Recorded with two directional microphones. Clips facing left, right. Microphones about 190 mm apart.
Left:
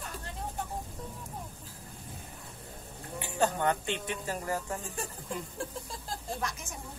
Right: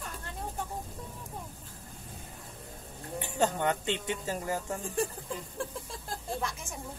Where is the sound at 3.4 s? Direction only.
20° right (ahead or behind).